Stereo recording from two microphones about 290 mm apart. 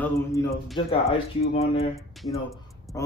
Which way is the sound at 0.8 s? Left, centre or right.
Centre.